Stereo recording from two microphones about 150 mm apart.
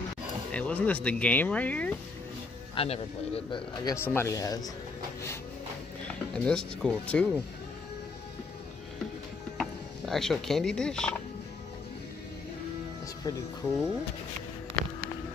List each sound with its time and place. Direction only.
0.5 s speech: 10° left (ahead or behind)
2.7 s a man's voice: 40° left (ahead or behind)
3.8 s speech: 15° left (ahead or behind)
6.0 s speech: 5° left (ahead or behind)
9.6 s speech: centre (ahead or behind)
13.6 s speech: 15° left (ahead or behind)